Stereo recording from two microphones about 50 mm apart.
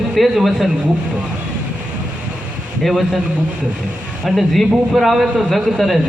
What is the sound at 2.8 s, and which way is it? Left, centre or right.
Speech, centre.